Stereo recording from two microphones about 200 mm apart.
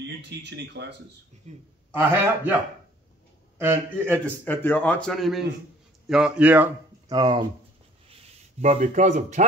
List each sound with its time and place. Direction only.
0.0 s speech: 60° right (ahead or behind)
1.5 s a man's voice: 35° right (ahead or behind)
1.9 s a man's voice: 10° right (ahead or behind)
3.5 s a man's voice: 10° right (ahead or behind)
4.5 s speech: 10° left (ahead or behind); by 6.7 s 5° right (ahead or behind)
7.1 s speech: 20° right (ahead or behind)
8.1 s speech: 35° right (ahead or behind)